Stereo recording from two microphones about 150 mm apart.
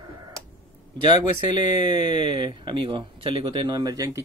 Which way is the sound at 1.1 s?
30° right (ahead or behind).